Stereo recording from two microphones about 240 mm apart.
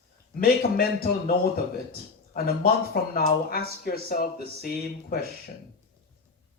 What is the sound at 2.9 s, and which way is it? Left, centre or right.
Speech, left.